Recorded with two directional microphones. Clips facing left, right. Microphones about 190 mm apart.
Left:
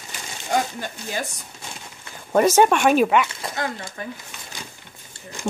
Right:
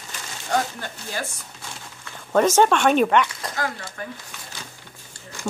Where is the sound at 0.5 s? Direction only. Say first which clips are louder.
Left 1 dB; 15° left (ahead or behind).